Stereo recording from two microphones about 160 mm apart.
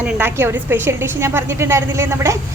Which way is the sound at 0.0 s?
10° right (ahead or behind).